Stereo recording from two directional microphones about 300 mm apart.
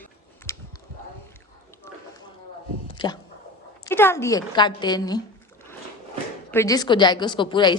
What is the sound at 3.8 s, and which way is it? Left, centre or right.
A woman's voice, centre.